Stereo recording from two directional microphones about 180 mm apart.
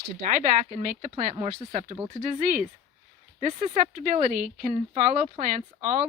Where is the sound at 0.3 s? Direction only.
50° right (ahead or behind).